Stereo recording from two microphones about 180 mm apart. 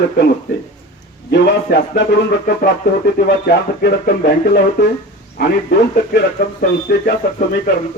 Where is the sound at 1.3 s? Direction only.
70° left (ahead or behind).